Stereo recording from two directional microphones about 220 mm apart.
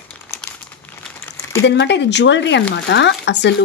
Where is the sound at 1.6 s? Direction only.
50° left (ahead or behind).